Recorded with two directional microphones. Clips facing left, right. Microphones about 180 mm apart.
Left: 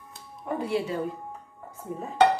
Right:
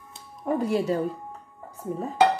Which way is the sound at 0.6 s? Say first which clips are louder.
Right 3 dB; 40° right (ahead or behind).